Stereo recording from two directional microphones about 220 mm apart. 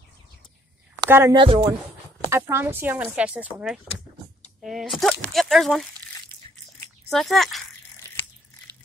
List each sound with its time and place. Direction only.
1.0 s speech: 15° right (ahead or behind)
2.2 s speech: 10° right (ahead or behind)
7.1 s speech: centre (ahead or behind)